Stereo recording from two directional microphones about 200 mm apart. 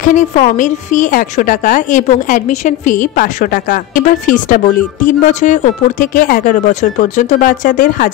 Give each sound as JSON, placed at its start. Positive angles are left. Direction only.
{"t": 0.0, "sound": "a woman's voice", "side_deg": 40}